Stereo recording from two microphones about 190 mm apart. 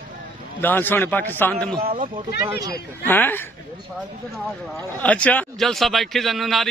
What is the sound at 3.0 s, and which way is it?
Speech, 10° left (ahead or behind).